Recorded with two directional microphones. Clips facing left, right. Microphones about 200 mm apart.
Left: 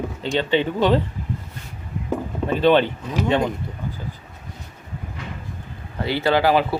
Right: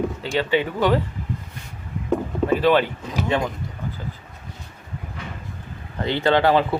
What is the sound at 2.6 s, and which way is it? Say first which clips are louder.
Speech: left 3 dB; 25° left (ahead or behind).